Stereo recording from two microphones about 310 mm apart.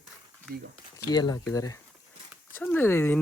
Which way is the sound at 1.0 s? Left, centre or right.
Centre.